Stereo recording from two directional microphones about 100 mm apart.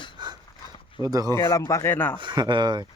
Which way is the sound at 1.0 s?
40° right (ahead or behind).